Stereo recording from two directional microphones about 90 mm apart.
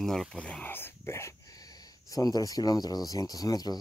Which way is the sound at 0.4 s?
15° left (ahead or behind).